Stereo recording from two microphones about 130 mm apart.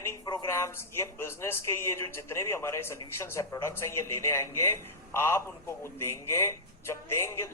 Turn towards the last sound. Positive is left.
turn(degrees=20)  # may be behind; listen again after turning